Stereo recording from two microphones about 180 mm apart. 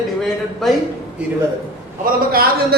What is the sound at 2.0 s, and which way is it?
Speech, 55° right (ahead or behind).